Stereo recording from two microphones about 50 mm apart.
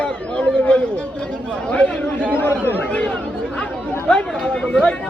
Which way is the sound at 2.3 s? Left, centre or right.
Left.